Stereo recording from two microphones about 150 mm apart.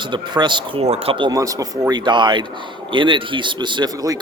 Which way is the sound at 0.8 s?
40° right (ahead or behind).